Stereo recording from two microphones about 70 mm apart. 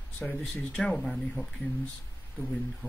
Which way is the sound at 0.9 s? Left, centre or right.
Centre.